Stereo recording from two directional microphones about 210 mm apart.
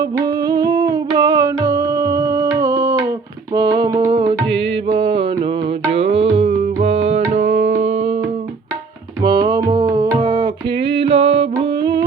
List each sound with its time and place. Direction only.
0.0 s music: 20° right (ahead or behind)
6.8 s tabla: 30° right (ahead or behind)
9.2 s music: 20° right (ahead or behind)